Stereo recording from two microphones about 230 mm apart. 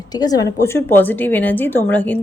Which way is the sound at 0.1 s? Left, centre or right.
Centre.